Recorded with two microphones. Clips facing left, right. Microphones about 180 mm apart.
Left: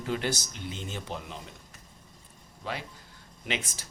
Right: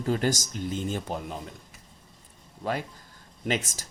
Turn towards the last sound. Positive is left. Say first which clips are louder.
# right 6 dB
turn(degrees=-45)  # may be behind; listen again after turning